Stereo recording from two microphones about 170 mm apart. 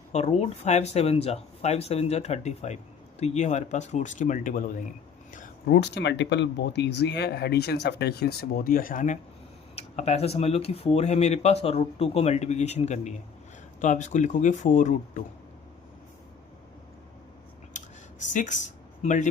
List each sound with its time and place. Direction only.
0.1 s speech: 40° left (ahead or behind)
5.7 s speech: 80° left; by 9.1 s 50° left (ahead or behind)
9.7 s speech: 40° left (ahead or behind)
17.7 s a sound: 45° left (ahead or behind)